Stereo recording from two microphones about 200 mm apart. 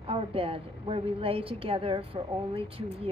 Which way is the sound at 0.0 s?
30° right (ahead or behind).